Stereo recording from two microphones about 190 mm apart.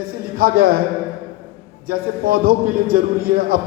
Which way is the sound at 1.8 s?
50° right (ahead or behind).